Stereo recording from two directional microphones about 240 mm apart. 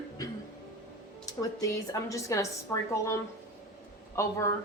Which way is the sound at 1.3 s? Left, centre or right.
Centre.